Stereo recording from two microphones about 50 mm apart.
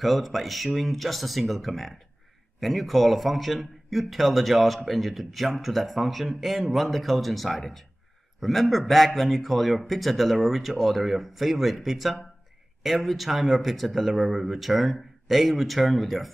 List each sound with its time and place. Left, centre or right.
0.0 s a man's voice: centre